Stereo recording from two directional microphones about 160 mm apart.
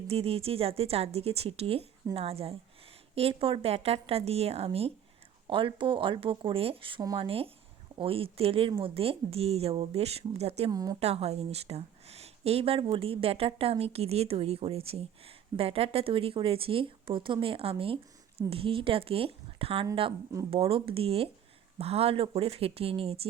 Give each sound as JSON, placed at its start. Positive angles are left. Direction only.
{"t": 0.1, "sound": "speech", "side_deg": -35}
{"t": 10.7, "sound": "a woman's voice", "side_deg": -25}
{"t": 11.0, "sound": "speech", "side_deg": -40}